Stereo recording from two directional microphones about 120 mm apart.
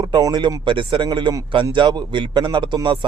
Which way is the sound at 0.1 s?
35° right (ahead or behind).